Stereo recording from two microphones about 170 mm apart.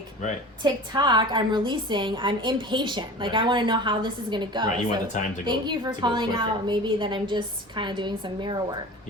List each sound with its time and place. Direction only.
0.6 s a woman's voice: 25° right (ahead or behind)